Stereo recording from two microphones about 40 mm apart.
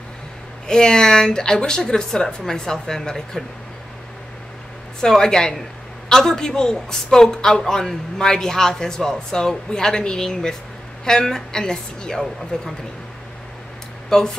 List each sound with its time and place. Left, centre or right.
0.7 s a woman's voice: centre
5.0 s a woman's voice: centre
14.0 s speech: centre